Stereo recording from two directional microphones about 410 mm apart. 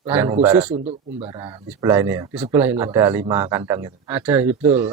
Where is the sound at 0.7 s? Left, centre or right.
Centre.